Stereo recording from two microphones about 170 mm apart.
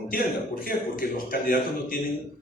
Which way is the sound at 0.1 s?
60° left (ahead or behind).